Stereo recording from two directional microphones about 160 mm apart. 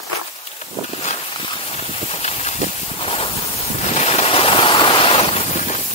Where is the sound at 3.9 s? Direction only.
40° left (ahead or behind).